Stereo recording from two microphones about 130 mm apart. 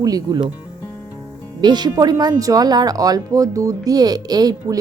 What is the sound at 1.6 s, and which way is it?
A woman's voice, 35° right (ahead or behind).